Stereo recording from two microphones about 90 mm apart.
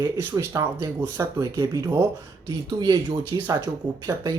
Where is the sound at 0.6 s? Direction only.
25° right (ahead or behind).